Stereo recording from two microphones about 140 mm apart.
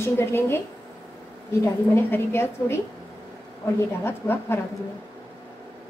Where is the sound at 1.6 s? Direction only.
15° left (ahead or behind).